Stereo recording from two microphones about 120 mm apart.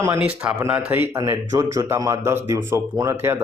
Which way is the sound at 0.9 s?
20° right (ahead or behind).